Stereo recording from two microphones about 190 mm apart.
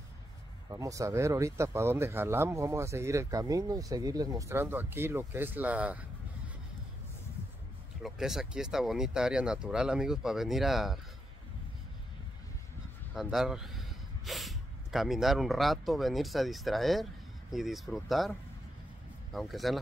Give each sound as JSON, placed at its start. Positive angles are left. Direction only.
{"t": 0.7, "sound": "speech", "side_deg": -15}
{"t": 8.0, "sound": "speech", "side_deg": 0}
{"t": 13.1, "sound": "speech", "side_deg": 0}
{"t": 19.3, "sound": "speech", "side_deg": 0}